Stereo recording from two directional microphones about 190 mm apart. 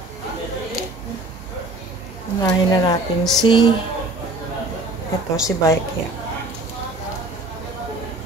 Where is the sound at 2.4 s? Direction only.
20° left (ahead or behind).